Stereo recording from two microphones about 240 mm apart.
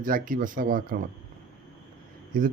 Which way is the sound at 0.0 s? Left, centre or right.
Right.